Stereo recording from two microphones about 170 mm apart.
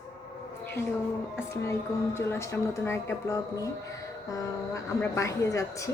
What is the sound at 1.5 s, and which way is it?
A woman's voice, 15° left (ahead or behind).